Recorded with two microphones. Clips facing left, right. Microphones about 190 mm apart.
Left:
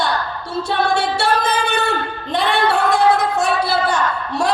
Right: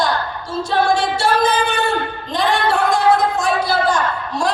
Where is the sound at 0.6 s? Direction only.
65° left (ahead or behind).